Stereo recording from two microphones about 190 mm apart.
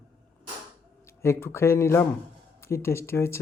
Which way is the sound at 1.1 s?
15° left (ahead or behind).